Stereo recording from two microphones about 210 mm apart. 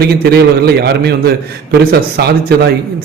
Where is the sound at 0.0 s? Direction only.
50° right (ahead or behind).